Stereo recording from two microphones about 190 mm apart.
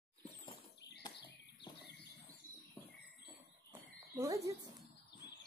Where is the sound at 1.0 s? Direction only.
20° left (ahead or behind).